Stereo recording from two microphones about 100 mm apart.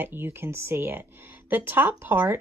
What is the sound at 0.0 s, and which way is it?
A woman's voice, 20° right (ahead or behind).